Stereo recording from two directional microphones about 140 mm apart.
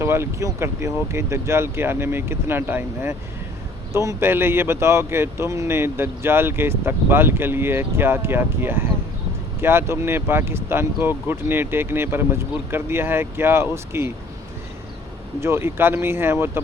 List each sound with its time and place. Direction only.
0.0 s speech: 20° right (ahead or behind)
15.4 s speech: 20° right (ahead or behind)